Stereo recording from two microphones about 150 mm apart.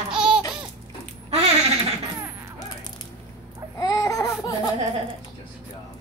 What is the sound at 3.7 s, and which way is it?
Baby cry, 25° left (ahead or behind).